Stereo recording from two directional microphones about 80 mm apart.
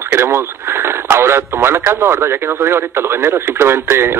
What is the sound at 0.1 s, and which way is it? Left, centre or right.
Speech, right.